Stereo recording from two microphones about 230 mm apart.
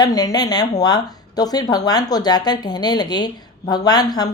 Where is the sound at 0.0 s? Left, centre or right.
Centre.